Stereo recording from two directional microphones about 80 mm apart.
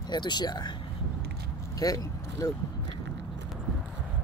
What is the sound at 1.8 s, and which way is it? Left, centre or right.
Speech, left.